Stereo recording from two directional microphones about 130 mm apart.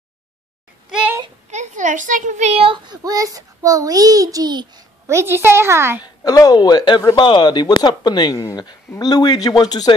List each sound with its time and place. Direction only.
0.8 s a sound: 5° right (ahead or behind)
1.5 s speech: 70° right (ahead or behind); by 3.0 s 45° right (ahead or behind)
3.0 s a child's voice: 30° right (ahead or behind)
6.0 s speech: 30° left (ahead or behind)